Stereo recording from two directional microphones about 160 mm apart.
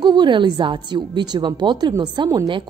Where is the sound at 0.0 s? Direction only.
30° right (ahead or behind).